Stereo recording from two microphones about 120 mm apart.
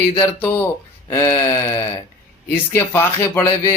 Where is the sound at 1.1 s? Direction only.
25° left (ahead or behind).